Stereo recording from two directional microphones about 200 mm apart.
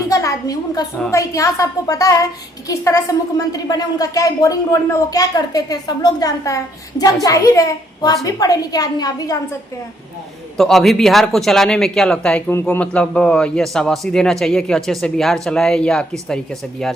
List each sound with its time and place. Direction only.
0.1 s a woman's voice: 15° left (ahead or behind)
10.6 s speech: centre (ahead or behind)